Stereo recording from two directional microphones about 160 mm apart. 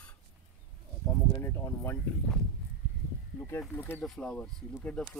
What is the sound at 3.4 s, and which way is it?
Speech, 10° left (ahead or behind).